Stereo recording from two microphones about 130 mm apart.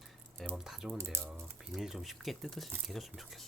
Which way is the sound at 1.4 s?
Centre (ahead or behind).